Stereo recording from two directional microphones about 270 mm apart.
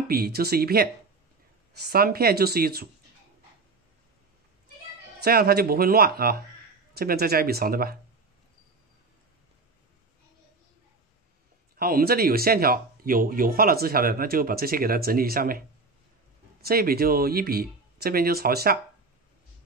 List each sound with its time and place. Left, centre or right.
0.1 s speech: right
1.9 s speech: right
5.2 s speech: right
11.7 s speech: right
16.6 s speech: right